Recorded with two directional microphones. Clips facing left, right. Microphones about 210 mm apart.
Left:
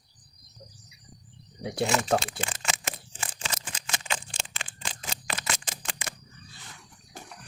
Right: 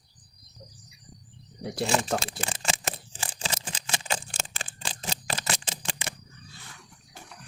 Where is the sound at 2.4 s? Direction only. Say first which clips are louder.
Right 2 dB; 35° right (ahead or behind).